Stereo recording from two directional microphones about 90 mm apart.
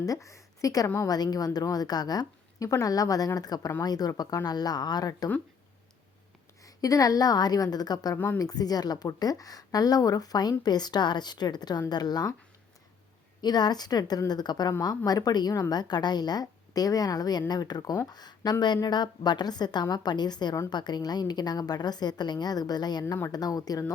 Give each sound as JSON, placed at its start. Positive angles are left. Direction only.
{"t": 0.0, "sound": "a woman's voice", "side_deg": 40}
{"t": 6.6, "sound": "a woman's voice", "side_deg": 40}
{"t": 13.4, "sound": "a woman's voice", "side_deg": 50}